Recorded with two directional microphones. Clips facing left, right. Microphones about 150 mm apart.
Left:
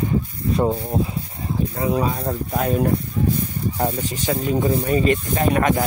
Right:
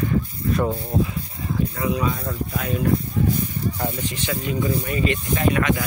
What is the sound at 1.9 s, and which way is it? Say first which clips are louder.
Speech: left 3 dB; 40° left (ahead or behind).